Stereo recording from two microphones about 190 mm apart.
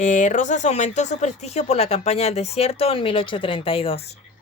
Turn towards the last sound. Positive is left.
turn(degrees=30)  # may be behind; listen again after turning